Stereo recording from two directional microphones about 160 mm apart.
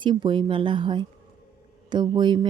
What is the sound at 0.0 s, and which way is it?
Speech, 30° right (ahead or behind).